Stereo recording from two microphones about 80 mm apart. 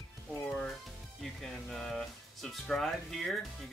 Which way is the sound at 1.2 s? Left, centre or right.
Centre.